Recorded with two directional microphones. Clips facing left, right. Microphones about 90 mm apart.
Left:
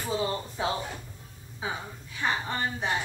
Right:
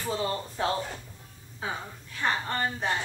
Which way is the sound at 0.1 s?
15° left (ahead or behind).